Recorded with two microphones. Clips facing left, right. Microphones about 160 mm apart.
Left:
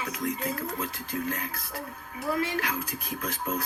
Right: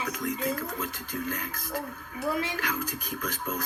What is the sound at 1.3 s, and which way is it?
Speech, 30° left (ahead or behind).